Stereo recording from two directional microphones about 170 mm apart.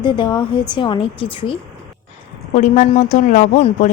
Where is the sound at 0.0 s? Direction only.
25° left (ahead or behind).